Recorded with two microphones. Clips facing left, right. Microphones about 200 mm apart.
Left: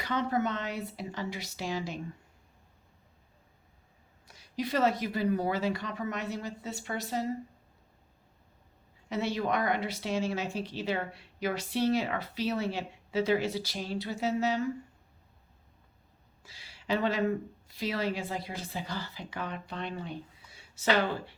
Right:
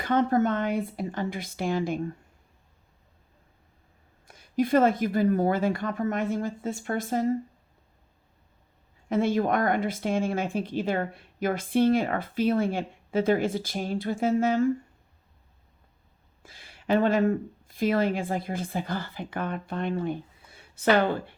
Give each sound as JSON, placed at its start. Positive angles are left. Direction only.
{"t": 0.0, "sound": "speech", "side_deg": -50}
{"t": 4.3, "sound": "speech", "side_deg": -50}
{"t": 9.0, "sound": "speech", "side_deg": -50}
{"t": 16.4, "sound": "speech", "side_deg": -50}